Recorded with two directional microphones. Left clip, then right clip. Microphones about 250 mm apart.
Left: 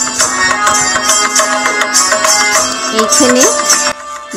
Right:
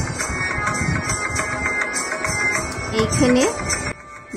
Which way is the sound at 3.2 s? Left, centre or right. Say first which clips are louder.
Left 7 dB; left.